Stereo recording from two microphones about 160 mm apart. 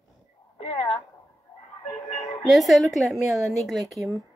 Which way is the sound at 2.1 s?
40° left (ahead or behind).